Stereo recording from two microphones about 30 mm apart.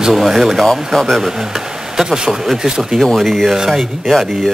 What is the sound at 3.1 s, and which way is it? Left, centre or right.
Speech, centre.